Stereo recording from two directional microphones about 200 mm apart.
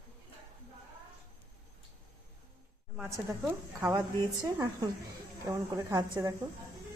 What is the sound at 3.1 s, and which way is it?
Speech, 10° right (ahead or behind).